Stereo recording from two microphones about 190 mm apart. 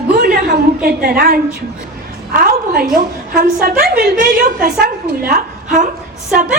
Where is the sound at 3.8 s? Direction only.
50° right (ahead or behind).